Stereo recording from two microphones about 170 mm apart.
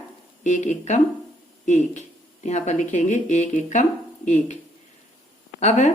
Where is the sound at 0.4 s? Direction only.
45° left (ahead or behind).